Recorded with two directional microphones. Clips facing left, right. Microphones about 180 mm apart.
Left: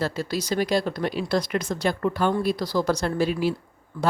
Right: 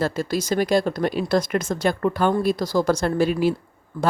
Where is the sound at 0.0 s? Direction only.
50° right (ahead or behind).